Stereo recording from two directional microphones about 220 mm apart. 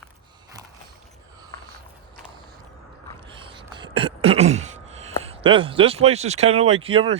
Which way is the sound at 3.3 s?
25° right (ahead or behind).